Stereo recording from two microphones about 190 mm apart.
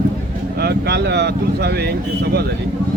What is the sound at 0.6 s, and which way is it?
Speech, 60° right (ahead or behind).